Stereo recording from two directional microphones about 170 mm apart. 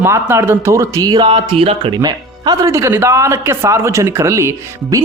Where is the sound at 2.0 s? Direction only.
25° right (ahead or behind).